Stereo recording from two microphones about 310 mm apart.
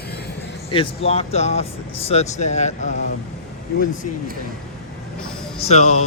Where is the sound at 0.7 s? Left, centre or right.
Centre.